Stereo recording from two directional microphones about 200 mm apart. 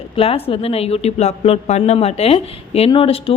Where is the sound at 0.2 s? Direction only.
30° left (ahead or behind).